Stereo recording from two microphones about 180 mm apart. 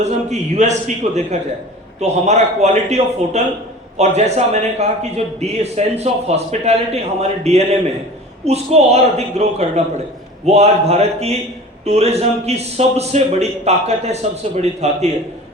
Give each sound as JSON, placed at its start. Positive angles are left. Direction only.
{"t": 0.0, "sound": "a man's voice", "side_deg": -40}